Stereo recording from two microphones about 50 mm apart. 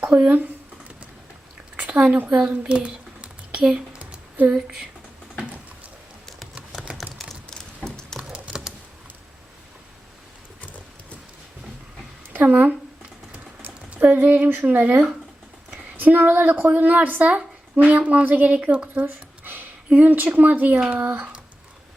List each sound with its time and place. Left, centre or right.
0.1 s a woman's voice: right
1.8 s a sound: right
7.0 s typing: centre
7.5 s a sound: centre
8.3 s computer keyboard: centre
10.6 s horse: left
12.3 s speech: right
13.3 s typing: right
15.7 s a woman's voice: right
19.0 s speech: right